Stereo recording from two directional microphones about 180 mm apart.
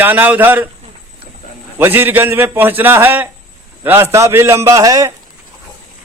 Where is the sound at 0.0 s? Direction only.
10° right (ahead or behind).